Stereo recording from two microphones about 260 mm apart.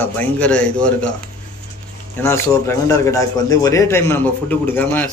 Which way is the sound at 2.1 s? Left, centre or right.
Centre.